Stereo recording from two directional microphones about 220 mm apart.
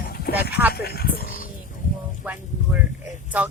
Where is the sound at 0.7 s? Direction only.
45° left (ahead or behind).